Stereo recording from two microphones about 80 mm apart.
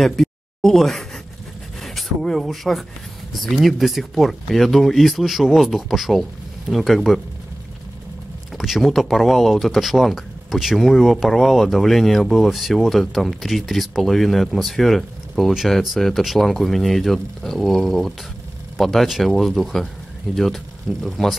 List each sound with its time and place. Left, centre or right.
0.0 s a sound: centre
1.8 s speech: centre
8.5 s speech: centre